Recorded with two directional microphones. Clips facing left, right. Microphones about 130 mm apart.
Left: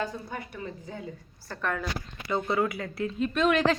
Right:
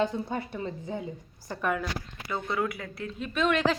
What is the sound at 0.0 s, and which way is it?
A woman's voice, 25° right (ahead or behind).